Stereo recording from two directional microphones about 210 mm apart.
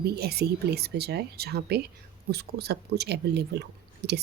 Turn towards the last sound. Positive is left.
turn(degrees=-55)  # may be behind; listen again after turning